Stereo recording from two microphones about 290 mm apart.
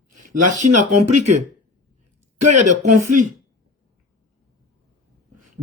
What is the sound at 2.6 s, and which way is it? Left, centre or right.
Speech, right.